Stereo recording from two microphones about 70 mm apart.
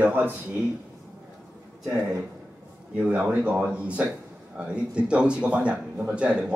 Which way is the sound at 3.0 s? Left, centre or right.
Centre.